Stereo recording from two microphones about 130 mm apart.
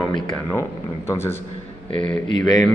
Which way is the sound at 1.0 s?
20° left (ahead or behind).